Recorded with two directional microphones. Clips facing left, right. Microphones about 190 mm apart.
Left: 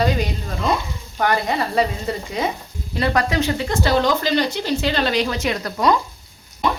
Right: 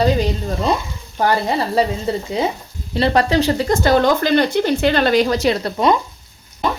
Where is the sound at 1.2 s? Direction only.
30° right (ahead or behind).